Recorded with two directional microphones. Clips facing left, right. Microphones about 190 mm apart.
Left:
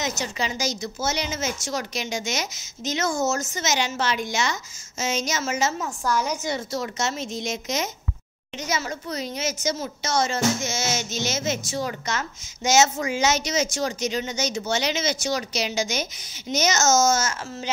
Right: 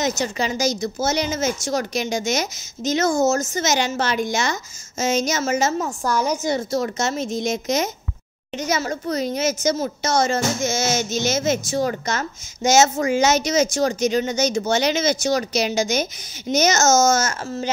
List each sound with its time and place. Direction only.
0.0 s a child's voice: 45° right (ahead or behind)